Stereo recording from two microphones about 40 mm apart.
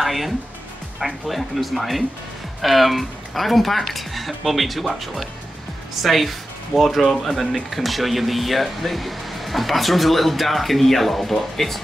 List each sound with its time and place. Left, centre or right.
0.0 s speech: centre